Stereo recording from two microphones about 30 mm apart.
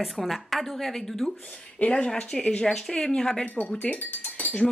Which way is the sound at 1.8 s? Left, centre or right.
Left.